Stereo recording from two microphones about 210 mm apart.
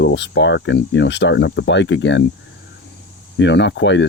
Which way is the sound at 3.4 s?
60° left (ahead or behind).